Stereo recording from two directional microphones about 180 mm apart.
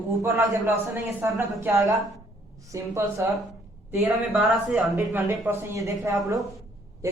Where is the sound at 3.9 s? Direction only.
10° right (ahead or behind).